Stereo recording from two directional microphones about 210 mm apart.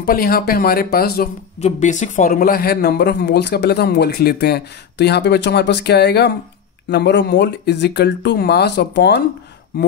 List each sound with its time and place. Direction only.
0.0 s speech: 45° left (ahead or behind)
1.6 s speech: 35° left (ahead or behind); by 9.2 s 55° left (ahead or behind)